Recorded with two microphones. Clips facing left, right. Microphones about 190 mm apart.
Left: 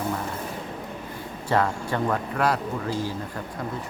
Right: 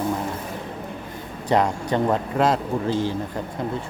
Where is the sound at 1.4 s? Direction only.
20° right (ahead or behind).